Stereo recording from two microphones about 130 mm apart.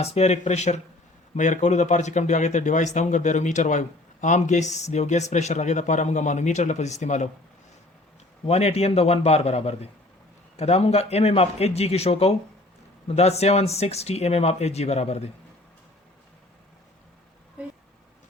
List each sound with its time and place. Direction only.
0.0 s speech: 55° left (ahead or behind)
8.4 s a man's voice: 55° left (ahead or behind)